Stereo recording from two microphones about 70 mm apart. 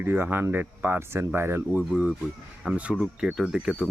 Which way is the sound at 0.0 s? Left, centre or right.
Right.